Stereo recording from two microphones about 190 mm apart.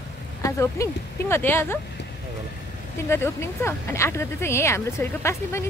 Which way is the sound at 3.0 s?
15° left (ahead or behind).